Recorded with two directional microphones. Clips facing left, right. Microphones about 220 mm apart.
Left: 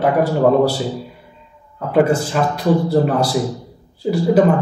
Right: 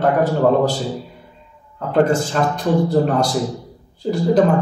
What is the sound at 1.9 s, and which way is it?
A man's voice, 5° left (ahead or behind).